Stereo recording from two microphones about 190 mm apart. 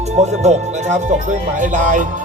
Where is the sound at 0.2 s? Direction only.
40° right (ahead or behind).